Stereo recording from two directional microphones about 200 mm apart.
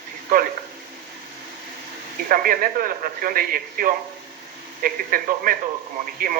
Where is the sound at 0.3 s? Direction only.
45° right (ahead or behind).